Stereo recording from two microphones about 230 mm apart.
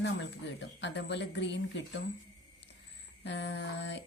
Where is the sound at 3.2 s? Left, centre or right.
Left.